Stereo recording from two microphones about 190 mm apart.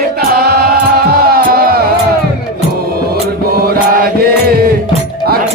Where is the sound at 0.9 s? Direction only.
50° right (ahead or behind).